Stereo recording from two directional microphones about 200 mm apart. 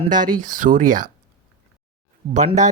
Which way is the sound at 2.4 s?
35° right (ahead or behind).